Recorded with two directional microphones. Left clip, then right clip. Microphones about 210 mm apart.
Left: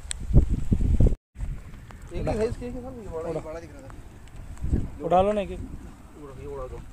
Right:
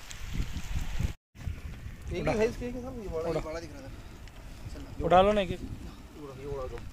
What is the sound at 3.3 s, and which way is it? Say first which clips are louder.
Speech: even; 10° left (ahead or behind).